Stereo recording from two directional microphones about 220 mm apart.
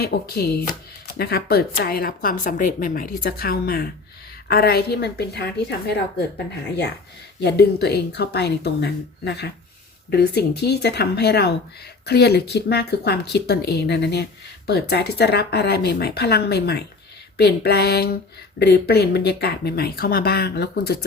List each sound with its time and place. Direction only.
0.0 s speech: 45° left (ahead or behind)